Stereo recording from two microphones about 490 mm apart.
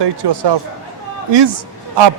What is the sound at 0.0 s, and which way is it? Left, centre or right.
Speech, right.